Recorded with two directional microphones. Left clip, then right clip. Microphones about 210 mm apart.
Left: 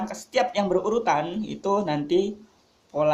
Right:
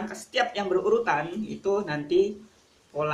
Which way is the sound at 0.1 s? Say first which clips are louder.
Left 2 dB; 45° left (ahead or behind).